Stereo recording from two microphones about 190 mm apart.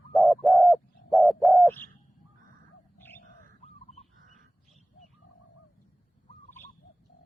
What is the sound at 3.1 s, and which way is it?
Bird, 35° left (ahead or behind).